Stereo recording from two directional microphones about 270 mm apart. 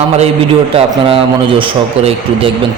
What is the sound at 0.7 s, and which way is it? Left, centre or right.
A man's voice, centre.